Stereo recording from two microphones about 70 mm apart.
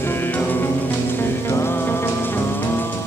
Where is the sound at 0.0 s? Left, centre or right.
Left.